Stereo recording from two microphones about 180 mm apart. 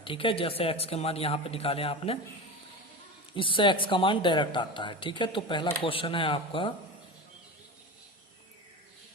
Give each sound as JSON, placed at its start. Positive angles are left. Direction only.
{"t": 0.0, "sound": "a man's voice", "side_deg": 30}
{"t": 3.3, "sound": "speech", "side_deg": 30}